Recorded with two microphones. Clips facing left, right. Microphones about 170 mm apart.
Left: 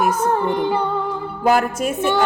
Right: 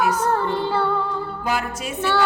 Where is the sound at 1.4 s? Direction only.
50° left (ahead or behind).